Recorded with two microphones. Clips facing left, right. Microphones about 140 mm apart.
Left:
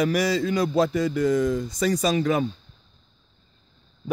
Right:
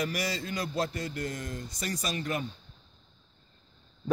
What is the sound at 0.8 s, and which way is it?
Speech, 90° left.